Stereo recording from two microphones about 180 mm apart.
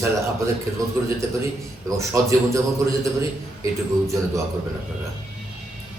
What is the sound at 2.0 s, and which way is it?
Speech, 15° right (ahead or behind).